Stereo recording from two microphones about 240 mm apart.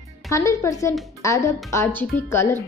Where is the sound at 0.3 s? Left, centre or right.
Centre.